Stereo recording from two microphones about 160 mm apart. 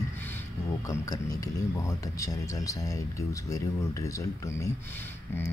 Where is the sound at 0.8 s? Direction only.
20° left (ahead or behind).